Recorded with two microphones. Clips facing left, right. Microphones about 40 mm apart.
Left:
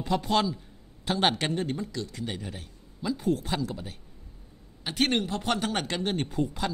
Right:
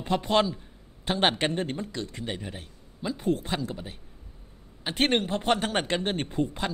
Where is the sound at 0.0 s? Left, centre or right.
Right.